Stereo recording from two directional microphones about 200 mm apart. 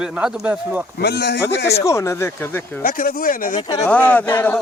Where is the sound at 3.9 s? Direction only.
10° left (ahead or behind).